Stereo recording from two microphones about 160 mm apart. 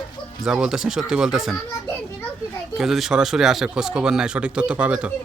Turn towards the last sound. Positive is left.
turn(degrees=-5)  # may be behind; listen again after turning